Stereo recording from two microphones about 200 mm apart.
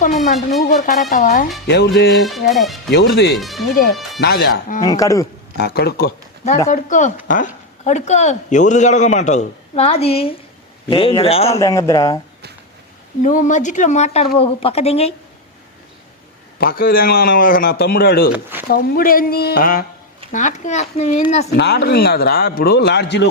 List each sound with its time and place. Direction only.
0.2 s speech: centre (ahead or behind)
0.6 s a man's voice: 45° left (ahead or behind)
1.6 s music: 55° left (ahead or behind)
2.2 s speech: centre (ahead or behind)
2.9 s music: 55° left (ahead or behind)
3.3 s speech: centre (ahead or behind)
4.2 s a man's voice: 55° left (ahead or behind)
4.8 s speech: 15° left (ahead or behind)
5.5 s a man's voice: 55° left (ahead or behind)
6.7 s a man's voice: 40° left (ahead or behind)
11.6 s speech: 15° left (ahead or behind)
13.2 s a man's voice: 40° left (ahead or behind)
16.6 s a man's voice: 50° left (ahead or behind)
21.5 s a man's voice: 55° left (ahead or behind)